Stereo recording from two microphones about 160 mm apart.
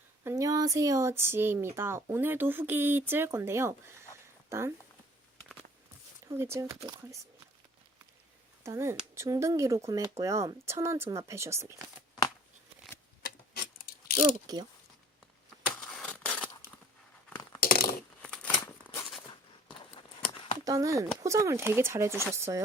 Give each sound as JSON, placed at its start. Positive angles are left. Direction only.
{"t": 0.3, "sound": "speech", "side_deg": -20}
{"t": 6.3, "sound": "speech", "side_deg": -15}
{"t": 8.6, "sound": "speech", "side_deg": -15}
{"t": 13.2, "sound": "keys jangling", "side_deg": 70}
{"t": 14.5, "sound": "speech", "side_deg": -25}
{"t": 15.7, "sound": "a sound", "side_deg": 5}
{"t": 17.6, "sound": "a sound", "side_deg": 65}
{"t": 18.2, "sound": "a sound", "side_deg": 5}
{"t": 19.8, "sound": "horse", "side_deg": 35}
{"t": 20.7, "sound": "speech", "side_deg": -20}